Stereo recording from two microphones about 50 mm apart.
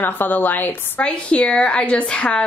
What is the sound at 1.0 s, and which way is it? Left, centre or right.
Speech, left.